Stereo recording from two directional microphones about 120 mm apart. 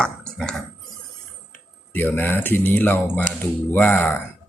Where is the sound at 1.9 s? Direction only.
15° left (ahead or behind).